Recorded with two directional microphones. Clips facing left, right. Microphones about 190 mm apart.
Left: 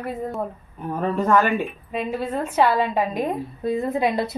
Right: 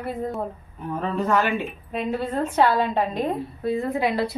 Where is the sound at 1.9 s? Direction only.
10° left (ahead or behind).